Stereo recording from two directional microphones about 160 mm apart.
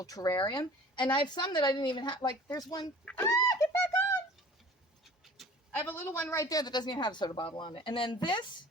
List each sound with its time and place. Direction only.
0.0 s speech: 20° left (ahead or behind)
3.2 s bird: 25° left (ahead or behind)
5.4 s a sound: centre (ahead or behind)
5.7 s speech: 10° left (ahead or behind); by 8.4 s 30° left (ahead or behind)